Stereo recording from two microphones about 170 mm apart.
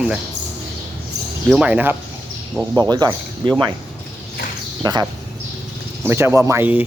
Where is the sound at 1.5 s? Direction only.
10° right (ahead or behind).